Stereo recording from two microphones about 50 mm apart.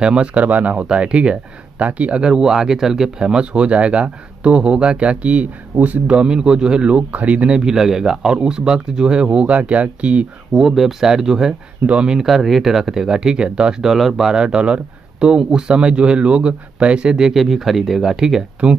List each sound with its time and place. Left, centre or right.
0.0 s speech: right
7.5 s speech: centre
10.5 s speech: centre
11.8 s speech: right
12.2 s speech: centre
14.4 s speech: centre
18.6 s speech: right